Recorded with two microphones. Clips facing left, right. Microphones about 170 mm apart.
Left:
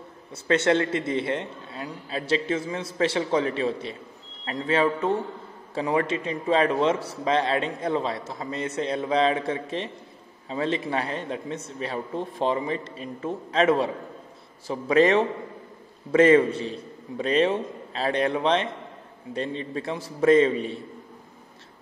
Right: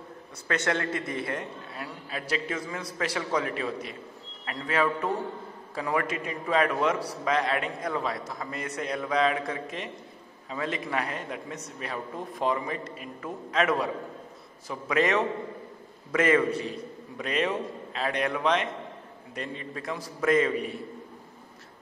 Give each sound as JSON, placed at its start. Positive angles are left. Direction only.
{"t": 0.5, "sound": "a man's voice", "side_deg": 25}